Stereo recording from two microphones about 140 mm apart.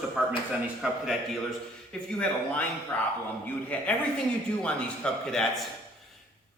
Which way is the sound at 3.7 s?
10° left (ahead or behind).